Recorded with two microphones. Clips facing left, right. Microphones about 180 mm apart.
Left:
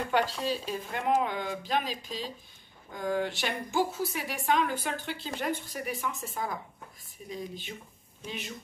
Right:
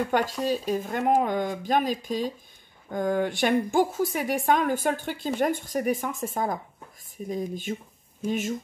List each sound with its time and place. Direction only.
0.1 s speech: 45° right (ahead or behind)